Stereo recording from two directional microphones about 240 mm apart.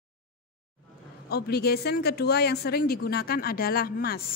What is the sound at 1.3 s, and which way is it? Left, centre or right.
A woman's voice, left.